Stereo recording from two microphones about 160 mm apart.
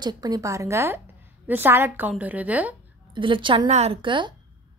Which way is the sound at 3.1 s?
30° right (ahead or behind).